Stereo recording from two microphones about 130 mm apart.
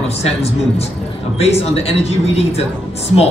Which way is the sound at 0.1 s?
55° left (ahead or behind).